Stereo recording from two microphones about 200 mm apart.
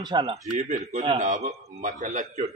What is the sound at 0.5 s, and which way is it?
A man's voice, 35° right (ahead or behind).